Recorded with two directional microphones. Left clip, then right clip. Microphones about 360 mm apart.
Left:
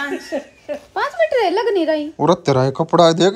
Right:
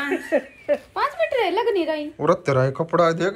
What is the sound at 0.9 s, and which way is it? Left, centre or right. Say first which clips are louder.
Speech: left 5 dB; left.